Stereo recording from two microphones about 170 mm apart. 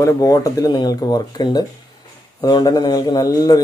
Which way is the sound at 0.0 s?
20° left (ahead or behind).